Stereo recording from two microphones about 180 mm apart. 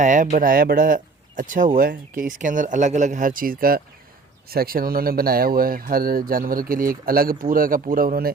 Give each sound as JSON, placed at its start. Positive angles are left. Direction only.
{"t": 0.0, "sound": "speech", "side_deg": -45}